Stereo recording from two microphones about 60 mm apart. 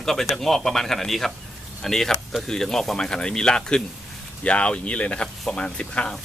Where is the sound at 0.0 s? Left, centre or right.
Centre.